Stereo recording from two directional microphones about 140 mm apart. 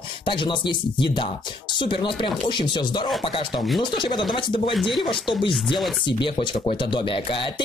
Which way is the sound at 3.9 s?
35° left (ahead or behind).